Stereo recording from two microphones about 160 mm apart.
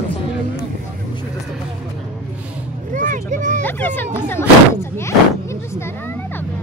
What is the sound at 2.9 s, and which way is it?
Vehicle, 55° right (ahead or behind).